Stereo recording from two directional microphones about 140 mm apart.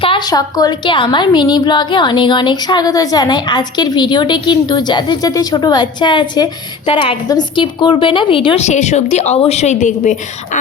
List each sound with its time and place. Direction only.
0.0 s a woman's voice: 35° left (ahead or behind)
8.6 s a woman's voice: 55° left (ahead or behind)